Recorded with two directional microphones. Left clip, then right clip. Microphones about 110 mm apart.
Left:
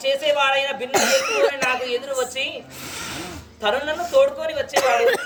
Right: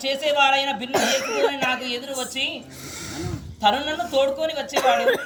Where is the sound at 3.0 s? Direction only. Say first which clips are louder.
Left 1 dB; 45° left (ahead or behind).